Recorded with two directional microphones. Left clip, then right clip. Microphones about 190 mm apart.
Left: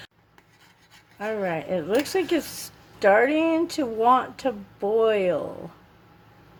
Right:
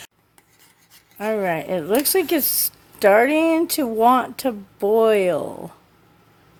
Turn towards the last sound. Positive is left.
turn(degrees=-60)  # may be behind; listen again after turning